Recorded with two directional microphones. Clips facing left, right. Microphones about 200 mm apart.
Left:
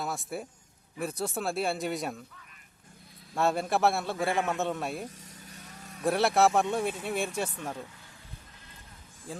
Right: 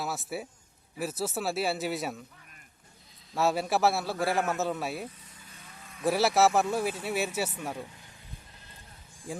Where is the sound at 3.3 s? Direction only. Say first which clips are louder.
Even; 5° right (ahead or behind).